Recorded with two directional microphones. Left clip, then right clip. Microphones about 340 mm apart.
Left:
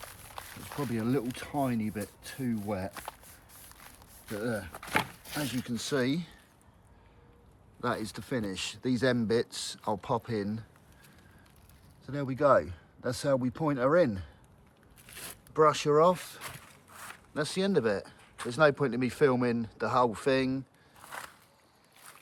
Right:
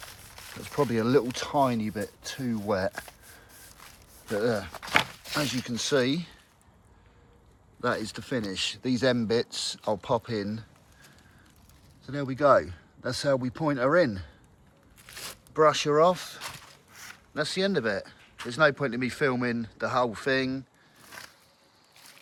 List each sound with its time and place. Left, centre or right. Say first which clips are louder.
0.9 s speech: right 6 dB; centre
4.4 s speech: right 7 dB; centre
7.8 s speech: right 4 dB; centre
12.0 s speech: right 3 dB; centre
15.3 s speech: right 3 dB; centre